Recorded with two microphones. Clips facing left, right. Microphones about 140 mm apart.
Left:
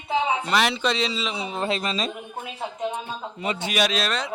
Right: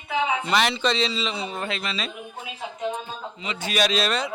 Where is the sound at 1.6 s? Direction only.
35° left (ahead or behind).